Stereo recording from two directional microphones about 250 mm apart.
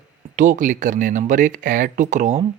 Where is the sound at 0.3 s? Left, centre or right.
Right.